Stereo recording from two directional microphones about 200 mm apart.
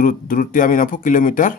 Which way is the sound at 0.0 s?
45° left (ahead or behind).